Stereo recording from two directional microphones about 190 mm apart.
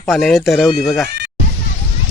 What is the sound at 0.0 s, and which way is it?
Speech, centre (ahead or behind).